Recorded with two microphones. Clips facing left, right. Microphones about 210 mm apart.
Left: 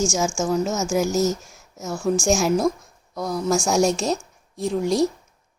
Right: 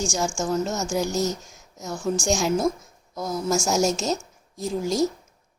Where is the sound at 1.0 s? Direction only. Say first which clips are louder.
Left 4 dB; 40° left (ahead or behind).